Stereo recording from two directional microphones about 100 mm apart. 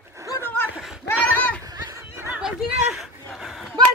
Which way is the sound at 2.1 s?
20° right (ahead or behind).